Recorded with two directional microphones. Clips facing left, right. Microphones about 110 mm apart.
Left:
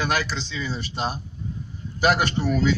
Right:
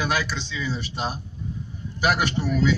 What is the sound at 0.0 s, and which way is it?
Speech, 10° right (ahead or behind).